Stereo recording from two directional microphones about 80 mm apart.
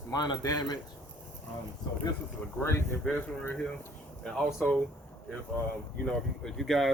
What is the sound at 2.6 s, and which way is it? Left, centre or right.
Speech, left.